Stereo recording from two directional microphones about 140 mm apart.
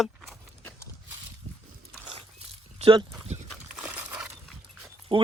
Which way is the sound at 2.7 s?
40° right (ahead or behind).